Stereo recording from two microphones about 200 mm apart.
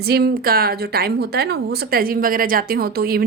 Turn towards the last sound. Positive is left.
turn(degrees=-50)  # may be behind; listen again after turning